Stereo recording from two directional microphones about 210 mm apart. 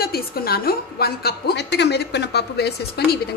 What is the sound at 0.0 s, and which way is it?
A woman's voice, 45° left (ahead or behind).